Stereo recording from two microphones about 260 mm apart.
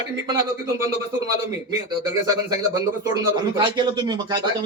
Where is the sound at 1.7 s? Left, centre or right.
Centre.